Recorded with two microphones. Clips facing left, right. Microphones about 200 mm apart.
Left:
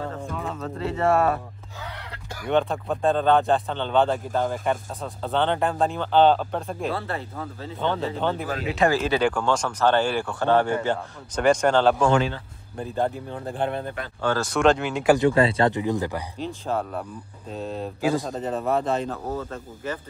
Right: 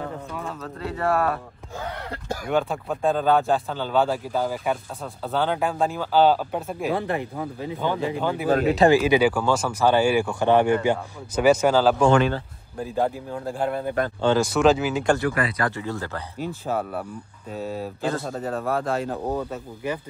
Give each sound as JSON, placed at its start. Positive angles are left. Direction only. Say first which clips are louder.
{"t": 0.9, "sound": "speech", "louder": "left 2 dB", "side_deg": 25}
{"t": 1.8, "sound": "speech", "louder": "right 6 dB", "side_deg": -45}
{"t": 2.5, "sound": "speech", "louder": "left 2 dB", "side_deg": 0}
{"t": 6.9, "sound": "speech", "louder": "right 4 dB", "side_deg": -15}
{"t": 12.1, "sound": "a man's voice", "louder": "right 3 dB", "side_deg": -60}
{"t": 12.7, "sound": "speech", "louder": "right 1 dB", "side_deg": -5}
{"t": 14.2, "sound": "speech", "louder": "right 4 dB", "side_deg": -20}
{"t": 14.5, "sound": "speech", "louder": "right 1 dB", "side_deg": -5}
{"t": 15.1, "sound": "speech", "louder": "left 5 dB", "side_deg": 25}
{"t": 16.3, "sound": "speech", "louder": "right 2 dB", "side_deg": -10}
{"t": 18.0, "sound": "a man's voice", "louder": "left 4 dB", "side_deg": 15}
{"t": 18.3, "sound": "speech", "louder": "left 1 dB", "side_deg": 0}
{"t": 19.3, "sound": "speech", "louder": "right 3 dB", "side_deg": -15}